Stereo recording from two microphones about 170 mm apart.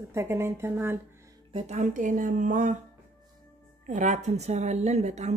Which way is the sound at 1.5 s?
35° right (ahead or behind).